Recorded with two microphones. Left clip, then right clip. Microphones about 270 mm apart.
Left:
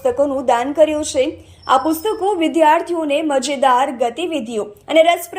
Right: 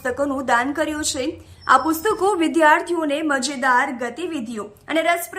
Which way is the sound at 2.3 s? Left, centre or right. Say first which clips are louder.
Left 3 dB; centre.